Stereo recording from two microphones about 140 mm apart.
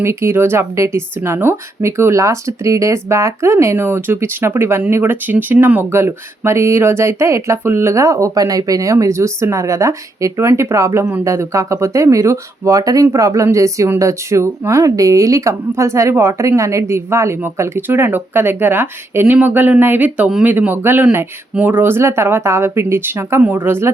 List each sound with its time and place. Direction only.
0.0 s speech: 15° right (ahead or behind)